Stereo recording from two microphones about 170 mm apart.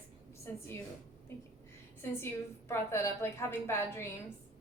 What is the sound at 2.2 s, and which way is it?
A woman's voice, 15° left (ahead or behind).